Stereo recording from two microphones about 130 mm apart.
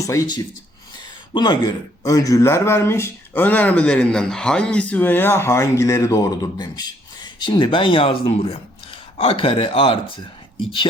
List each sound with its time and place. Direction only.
0.0 s speech: 25° left (ahead or behind); by 10.2 s 45° left (ahead or behind)